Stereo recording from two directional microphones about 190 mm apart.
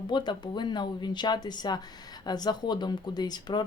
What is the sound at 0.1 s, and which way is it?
Speech, 25° left (ahead or behind).